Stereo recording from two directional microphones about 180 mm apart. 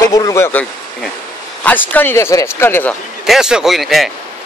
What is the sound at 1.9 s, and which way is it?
A man's voice, 15° left (ahead or behind).